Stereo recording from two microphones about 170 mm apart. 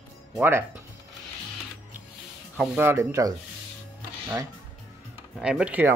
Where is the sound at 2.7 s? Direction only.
15° right (ahead or behind).